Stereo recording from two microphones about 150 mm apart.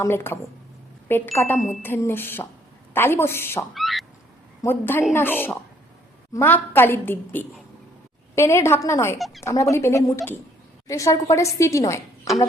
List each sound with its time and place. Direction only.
0.0 s a woman's voice: 15° left (ahead or behind)
3.8 s a sound: centre (ahead or behind)
4.6 s a woman's voice: 15° left (ahead or behind)
9.1 s speech: centre (ahead or behind)
9.4 s a woman's voice: 20° left (ahead or behind)